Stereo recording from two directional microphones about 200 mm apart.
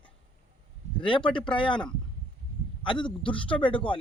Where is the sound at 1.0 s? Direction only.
25° left (ahead or behind).